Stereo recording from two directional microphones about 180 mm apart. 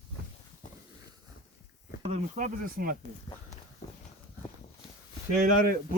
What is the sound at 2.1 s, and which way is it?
Speech, 45° right (ahead or behind).